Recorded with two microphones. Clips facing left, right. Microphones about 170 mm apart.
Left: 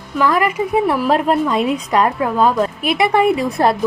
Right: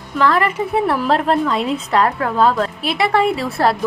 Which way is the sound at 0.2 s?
10° left (ahead or behind).